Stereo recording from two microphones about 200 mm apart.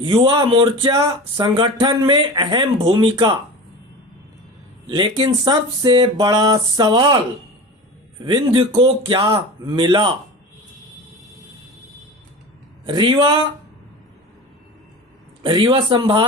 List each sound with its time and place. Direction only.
0.0 s speech: 25° right (ahead or behind)
4.9 s speech: 25° right (ahead or behind)
8.2 s speech: 25° right (ahead or behind)
12.8 s speech: 25° right (ahead or behind)
15.4 s speech: 25° right (ahead or behind)